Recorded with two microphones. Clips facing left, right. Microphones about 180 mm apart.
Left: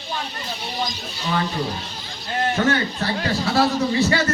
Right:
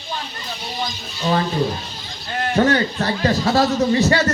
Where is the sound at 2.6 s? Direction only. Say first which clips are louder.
Right 7 dB; 40° right (ahead or behind).